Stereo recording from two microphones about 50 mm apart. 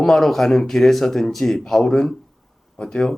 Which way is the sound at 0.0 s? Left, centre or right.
Centre.